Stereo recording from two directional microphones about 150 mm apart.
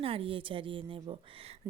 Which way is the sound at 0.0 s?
40° right (ahead or behind).